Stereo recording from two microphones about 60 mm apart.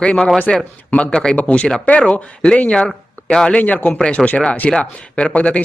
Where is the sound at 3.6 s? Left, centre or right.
Left.